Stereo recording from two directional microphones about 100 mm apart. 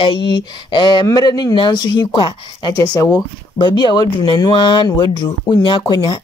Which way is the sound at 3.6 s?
50° left (ahead or behind).